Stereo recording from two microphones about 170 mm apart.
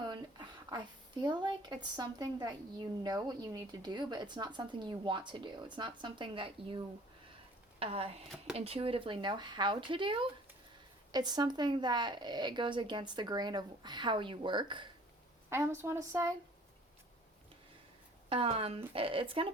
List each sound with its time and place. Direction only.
0.0 s speech: 25° right (ahead or behind)
15.4 s a woman's voice: 15° right (ahead or behind)
18.3 s speech: 35° right (ahead or behind)